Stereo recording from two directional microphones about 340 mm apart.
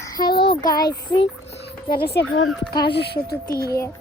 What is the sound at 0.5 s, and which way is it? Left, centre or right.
Speech, centre.